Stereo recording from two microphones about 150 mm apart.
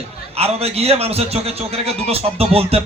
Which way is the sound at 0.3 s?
40° right (ahead or behind).